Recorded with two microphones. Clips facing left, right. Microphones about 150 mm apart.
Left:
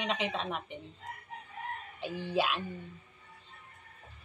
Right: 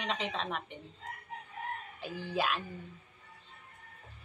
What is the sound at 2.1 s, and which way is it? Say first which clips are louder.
Speech: left 2 dB; centre (ahead or behind).